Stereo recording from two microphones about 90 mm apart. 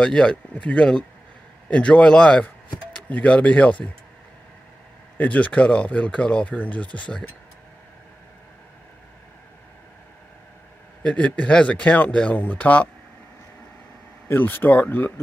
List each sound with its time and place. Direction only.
0.0 s speech: 10° left (ahead or behind)
5.1 s speech: 15° left (ahead or behind)
11.0 s speech: 10° left (ahead or behind)
14.2 s speech: 20° left (ahead or behind)